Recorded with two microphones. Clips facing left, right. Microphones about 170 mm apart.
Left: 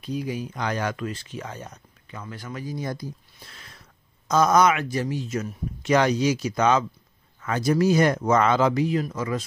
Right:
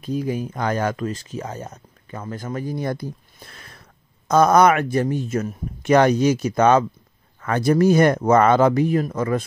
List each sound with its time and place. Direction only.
0.0 s speech: 45° right (ahead or behind)